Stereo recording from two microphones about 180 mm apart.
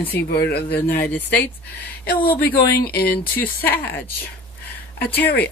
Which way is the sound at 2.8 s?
55° left (ahead or behind).